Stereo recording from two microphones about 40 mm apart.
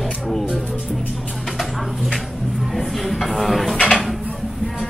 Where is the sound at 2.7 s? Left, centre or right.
Centre.